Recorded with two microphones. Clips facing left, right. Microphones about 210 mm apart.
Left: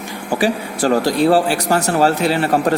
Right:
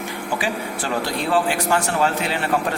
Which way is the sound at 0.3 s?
40° left (ahead or behind).